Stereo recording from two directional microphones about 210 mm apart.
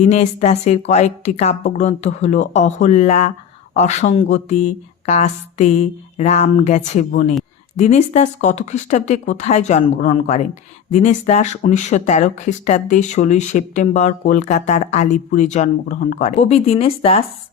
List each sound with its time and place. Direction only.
0.0 s speech: 30° left (ahead or behind)